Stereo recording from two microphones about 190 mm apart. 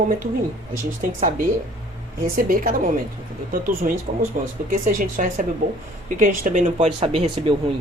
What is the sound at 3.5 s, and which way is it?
A woman's voice, 45° right (ahead or behind).